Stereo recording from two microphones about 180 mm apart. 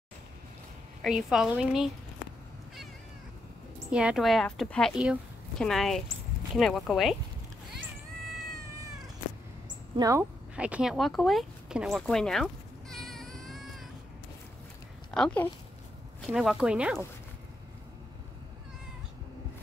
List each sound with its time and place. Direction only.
1.0 s speech: 5° right (ahead or behind)
3.9 s speech: 5° right (ahead or behind)
9.9 s speech: 20° right (ahead or behind)
10.5 s speech: 5° right (ahead or behind)
12.9 s a sound: centre (ahead or behind)
15.0 s speech: 5° left (ahead or behind)